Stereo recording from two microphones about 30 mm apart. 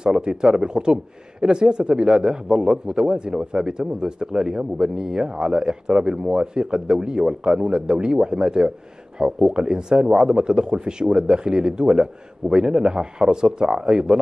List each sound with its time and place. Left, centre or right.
0.0 s a man's voice: right